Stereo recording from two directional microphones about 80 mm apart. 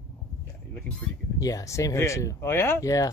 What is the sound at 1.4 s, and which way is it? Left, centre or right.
Speech, left.